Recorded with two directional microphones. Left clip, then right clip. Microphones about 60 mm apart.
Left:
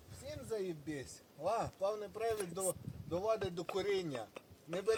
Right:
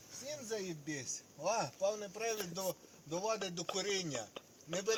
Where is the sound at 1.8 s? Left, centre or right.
Left.